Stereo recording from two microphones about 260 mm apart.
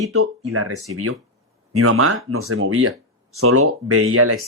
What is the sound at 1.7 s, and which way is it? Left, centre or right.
Speech, right.